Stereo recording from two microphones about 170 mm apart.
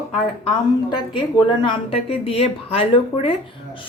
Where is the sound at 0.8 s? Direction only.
25° left (ahead or behind).